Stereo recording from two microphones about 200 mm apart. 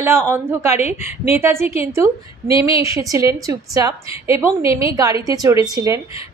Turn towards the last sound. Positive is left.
turn(degrees=-15)  # may be behind; listen again after turning